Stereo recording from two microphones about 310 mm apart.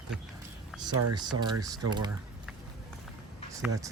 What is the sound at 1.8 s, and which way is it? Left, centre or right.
Speech, centre.